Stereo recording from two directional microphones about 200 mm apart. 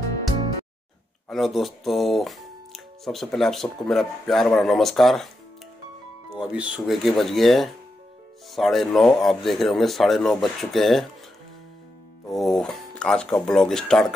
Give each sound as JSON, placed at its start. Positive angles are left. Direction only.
{"t": 1.3, "sound": "speech", "side_deg": 0}
{"t": 6.3, "sound": "speech", "side_deg": -5}
{"t": 12.3, "sound": "speech", "side_deg": 0}